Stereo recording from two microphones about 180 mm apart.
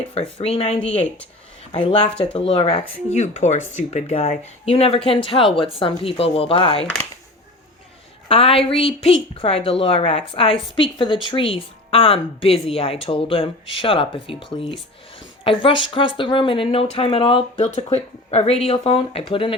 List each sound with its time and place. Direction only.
0.1 s speech: 35° left (ahead or behind)
8.3 s speech: 30° left (ahead or behind)